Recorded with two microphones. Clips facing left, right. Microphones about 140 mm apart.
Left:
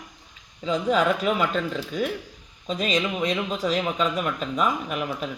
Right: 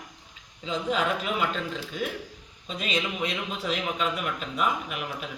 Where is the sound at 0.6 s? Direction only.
45° left (ahead or behind).